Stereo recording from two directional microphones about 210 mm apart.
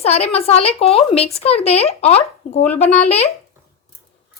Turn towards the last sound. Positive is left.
turn(degrees=30)  # may be behind; listen again after turning